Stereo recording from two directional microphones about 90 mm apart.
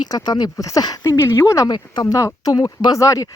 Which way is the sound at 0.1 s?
45° left (ahead or behind).